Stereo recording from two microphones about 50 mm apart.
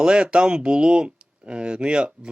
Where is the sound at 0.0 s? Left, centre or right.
Centre.